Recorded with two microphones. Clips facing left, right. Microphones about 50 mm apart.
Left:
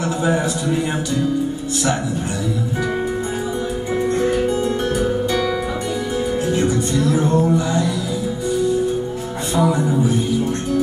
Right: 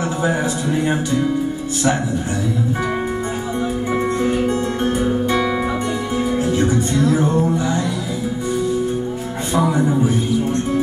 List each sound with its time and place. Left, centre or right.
3.9 s music: right
6.6 s music: right
9.6 s music: right